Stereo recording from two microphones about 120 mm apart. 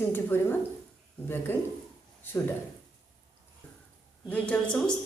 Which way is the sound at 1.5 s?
15° left (ahead or behind).